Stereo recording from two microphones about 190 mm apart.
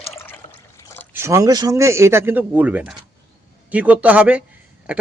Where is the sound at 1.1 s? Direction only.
15° right (ahead or behind).